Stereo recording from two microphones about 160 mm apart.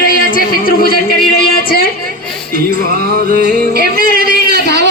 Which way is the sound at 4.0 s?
60° left (ahead or behind).